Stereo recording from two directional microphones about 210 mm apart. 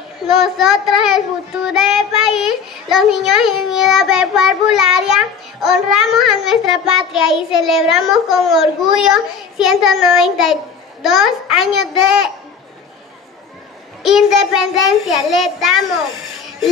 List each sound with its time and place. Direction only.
0.4 s child singing: centre (ahead or behind)
14.0 s child singing: centre (ahead or behind)